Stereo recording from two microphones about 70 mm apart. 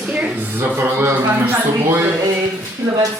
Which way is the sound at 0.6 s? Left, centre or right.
Right.